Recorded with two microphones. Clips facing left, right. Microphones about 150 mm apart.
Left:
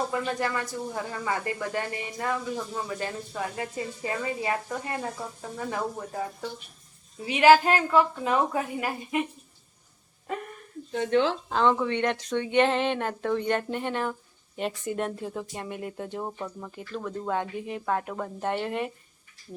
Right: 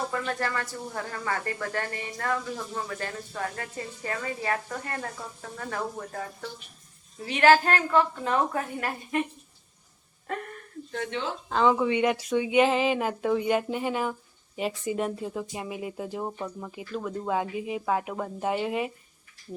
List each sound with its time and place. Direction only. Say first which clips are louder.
0.1 s speech: left 2 dB; 15° left (ahead or behind)
7.3 s speech: left 2 dB; 10° left (ahead or behind)
11.1 s speech: left 12 dB; 50° left (ahead or behind)
11.4 s speech: right 1 dB; centre (ahead or behind)